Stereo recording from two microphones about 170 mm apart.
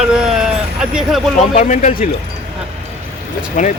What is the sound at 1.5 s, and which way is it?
Speech, 45° left (ahead or behind).